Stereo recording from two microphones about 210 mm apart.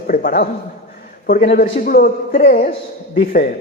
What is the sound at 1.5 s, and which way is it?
A man's voice, 45° left (ahead or behind).